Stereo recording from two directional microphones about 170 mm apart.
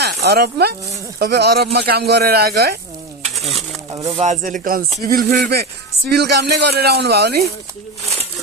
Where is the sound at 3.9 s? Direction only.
20° right (ahead or behind).